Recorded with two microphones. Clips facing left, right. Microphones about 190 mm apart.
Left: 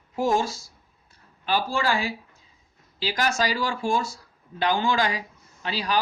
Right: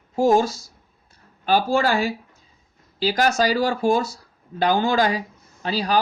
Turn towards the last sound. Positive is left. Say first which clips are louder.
# right 5 dB
turn(degrees=-40)  # may be behind; listen again after turning